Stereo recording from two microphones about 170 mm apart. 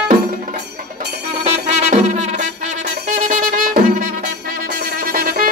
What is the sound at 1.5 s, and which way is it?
Music, 40° right (ahead or behind).